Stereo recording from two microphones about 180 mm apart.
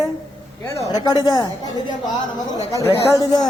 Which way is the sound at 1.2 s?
20° left (ahead or behind).